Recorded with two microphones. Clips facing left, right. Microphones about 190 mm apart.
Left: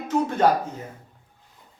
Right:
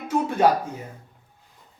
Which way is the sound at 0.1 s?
10° right (ahead or behind).